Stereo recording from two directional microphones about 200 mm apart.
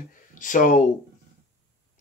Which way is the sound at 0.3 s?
40° left (ahead or behind).